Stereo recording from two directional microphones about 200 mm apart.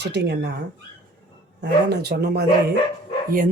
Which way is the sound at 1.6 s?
55° right (ahead or behind).